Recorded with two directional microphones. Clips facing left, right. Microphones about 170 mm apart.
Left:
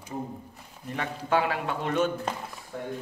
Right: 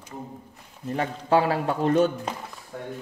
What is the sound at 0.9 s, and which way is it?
A man's voice, 35° right (ahead or behind).